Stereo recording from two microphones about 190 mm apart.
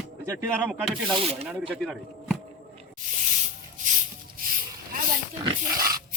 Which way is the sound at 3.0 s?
45° right (ahead or behind).